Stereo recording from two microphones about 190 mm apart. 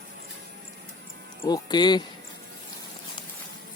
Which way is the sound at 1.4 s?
20° left (ahead or behind).